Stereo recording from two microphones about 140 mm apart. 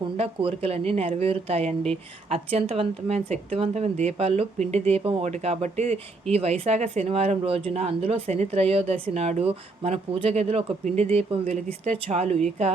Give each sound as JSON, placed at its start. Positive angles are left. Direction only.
{"t": 0.0, "sound": "a woman's voice", "side_deg": -40}